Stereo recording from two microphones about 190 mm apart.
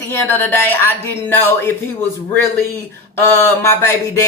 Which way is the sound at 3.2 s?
10° left (ahead or behind).